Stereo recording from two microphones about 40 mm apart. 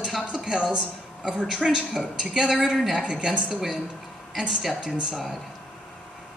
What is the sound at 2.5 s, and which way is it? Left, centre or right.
Speech, centre.